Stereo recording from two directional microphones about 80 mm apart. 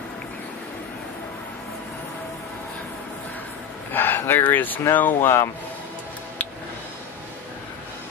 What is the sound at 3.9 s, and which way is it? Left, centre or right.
Speech, left.